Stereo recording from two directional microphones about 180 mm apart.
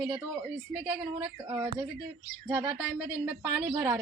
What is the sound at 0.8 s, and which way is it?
A woman's voice, 15° right (ahead or behind).